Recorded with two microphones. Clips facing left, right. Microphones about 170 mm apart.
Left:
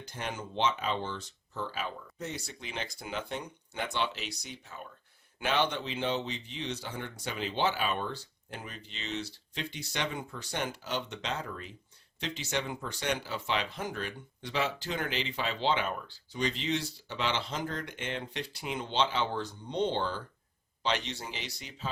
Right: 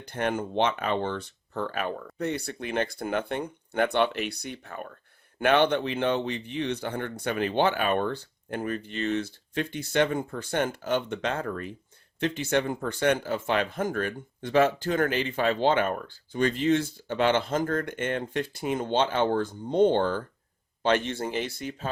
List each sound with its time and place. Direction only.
0.0 s speech: 60° right (ahead or behind)